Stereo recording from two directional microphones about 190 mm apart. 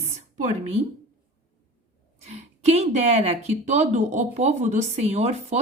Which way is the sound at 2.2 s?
35° right (ahead or behind).